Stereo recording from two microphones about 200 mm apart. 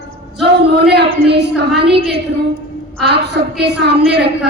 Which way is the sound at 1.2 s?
55° right (ahead or behind).